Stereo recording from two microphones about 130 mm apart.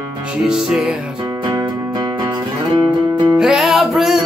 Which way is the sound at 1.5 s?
35° right (ahead or behind).